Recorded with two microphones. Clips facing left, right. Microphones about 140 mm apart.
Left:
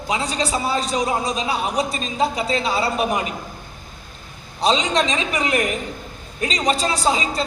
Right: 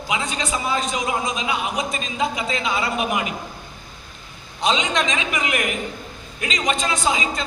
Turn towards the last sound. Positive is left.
turn(degrees=35)  # may be behind; listen again after turning